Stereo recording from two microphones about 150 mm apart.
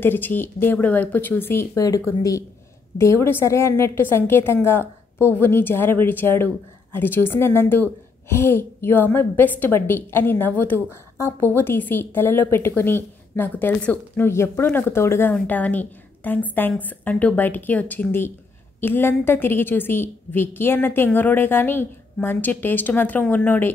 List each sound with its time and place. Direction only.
0.0 s a woman's voice: 15° left (ahead or behind)